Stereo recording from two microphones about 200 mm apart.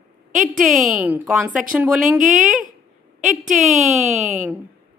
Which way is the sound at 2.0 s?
40° right (ahead or behind).